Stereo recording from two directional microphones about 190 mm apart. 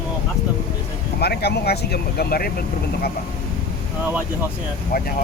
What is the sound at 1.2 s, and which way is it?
Speech, 60° left (ahead or behind).